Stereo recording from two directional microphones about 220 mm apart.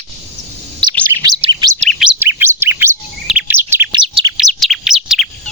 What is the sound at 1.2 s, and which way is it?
Bird, 15° right (ahead or behind).